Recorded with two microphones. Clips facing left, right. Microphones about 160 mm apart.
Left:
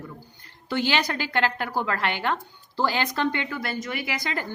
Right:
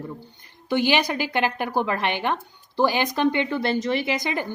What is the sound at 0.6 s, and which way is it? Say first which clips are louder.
Speech: right 4 dB; 15° right (ahead or behind).